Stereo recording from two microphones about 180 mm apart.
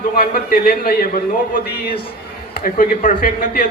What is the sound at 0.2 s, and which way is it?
Speech, 55° left (ahead or behind).